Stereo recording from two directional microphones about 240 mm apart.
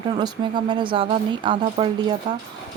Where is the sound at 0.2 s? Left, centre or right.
Centre.